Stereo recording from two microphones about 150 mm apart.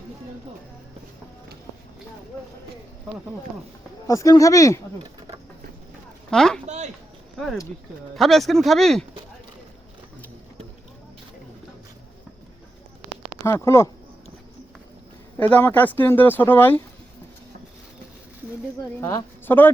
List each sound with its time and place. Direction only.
4.0 s speech: 20° left (ahead or behind)
6.3 s speech: 5° left (ahead or behind)
6.7 s speech: 50° right (ahead or behind)
7.3 s speech: centre (ahead or behind)
13.4 s speech: 20° left (ahead or behind)
15.4 s speech: 10° left (ahead or behind)
18.9 s speech: 20° left (ahead or behind)